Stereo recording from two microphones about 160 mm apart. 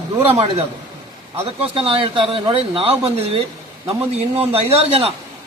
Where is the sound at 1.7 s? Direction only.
35° right (ahead or behind).